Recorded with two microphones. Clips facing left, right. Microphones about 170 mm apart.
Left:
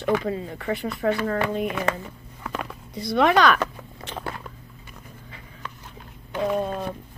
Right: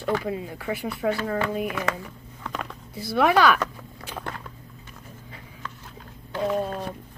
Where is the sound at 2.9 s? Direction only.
5° right (ahead or behind).